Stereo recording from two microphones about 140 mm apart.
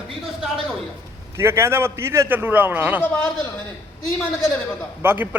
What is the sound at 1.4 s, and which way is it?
A man's voice, 20° right (ahead or behind).